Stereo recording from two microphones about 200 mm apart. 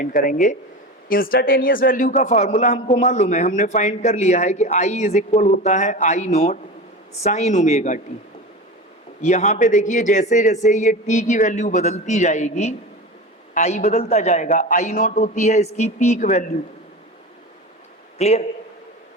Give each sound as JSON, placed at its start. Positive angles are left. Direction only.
{"t": 0.0, "sound": "a man's voice", "side_deg": 45}
{"t": 9.2, "sound": "a man's voice", "side_deg": 35}
{"t": 18.2, "sound": "a man's voice", "side_deg": 30}